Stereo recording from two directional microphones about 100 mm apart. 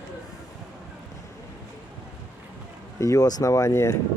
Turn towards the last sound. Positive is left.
turn(degrees=30)  # may be behind; listen again after turning